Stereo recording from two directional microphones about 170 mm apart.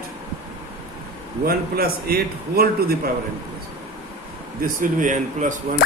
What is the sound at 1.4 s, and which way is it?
Speech, 60° right (ahead or behind).